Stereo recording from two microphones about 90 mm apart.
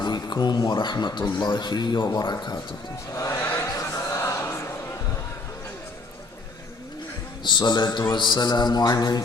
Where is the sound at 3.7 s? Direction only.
35° left (ahead or behind).